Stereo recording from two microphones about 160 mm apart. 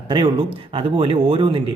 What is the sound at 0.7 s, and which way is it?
Speech, 35° right (ahead or behind).